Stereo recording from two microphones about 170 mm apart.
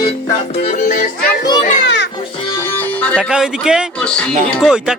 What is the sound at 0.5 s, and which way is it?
Music, 40° left (ahead or behind).